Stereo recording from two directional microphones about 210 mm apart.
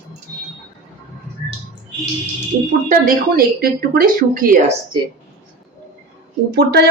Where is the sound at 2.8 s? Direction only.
45° right (ahead or behind).